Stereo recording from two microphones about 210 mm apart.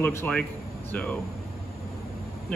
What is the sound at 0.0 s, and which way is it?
Speech, 10° left (ahead or behind).